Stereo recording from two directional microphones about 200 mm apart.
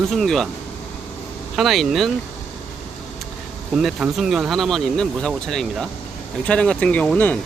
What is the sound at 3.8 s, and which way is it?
Speech, centre (ahead or behind).